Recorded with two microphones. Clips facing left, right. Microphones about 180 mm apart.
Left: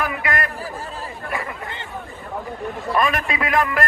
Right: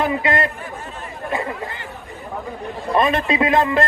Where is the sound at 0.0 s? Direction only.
25° right (ahead or behind).